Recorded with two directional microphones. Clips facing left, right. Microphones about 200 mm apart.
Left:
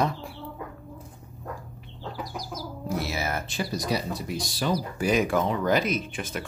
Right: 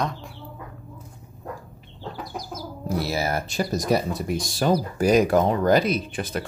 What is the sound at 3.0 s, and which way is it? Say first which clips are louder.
Speech: right 6 dB; 35° right (ahead or behind).